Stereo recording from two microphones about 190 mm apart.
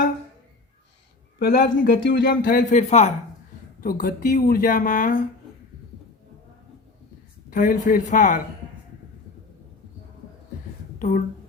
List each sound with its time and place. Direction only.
1.4 s speech: 55° left (ahead or behind)
2.3 s speech: 50° left (ahead or behind)
3.8 s speech: 50° left (ahead or behind)
7.5 s speech: 45° left (ahead or behind)